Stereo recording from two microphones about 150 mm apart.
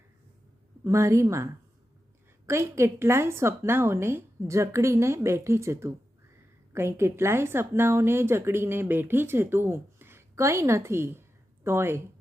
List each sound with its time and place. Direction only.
0.9 s speech: 20° right (ahead or behind)
2.5 s a woman's voice: 20° right (ahead or behind)